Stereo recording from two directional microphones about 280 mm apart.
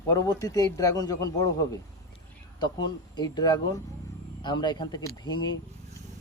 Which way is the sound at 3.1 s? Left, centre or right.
Centre.